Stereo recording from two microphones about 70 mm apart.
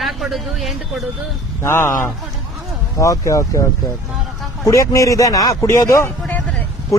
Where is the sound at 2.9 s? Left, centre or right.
Left.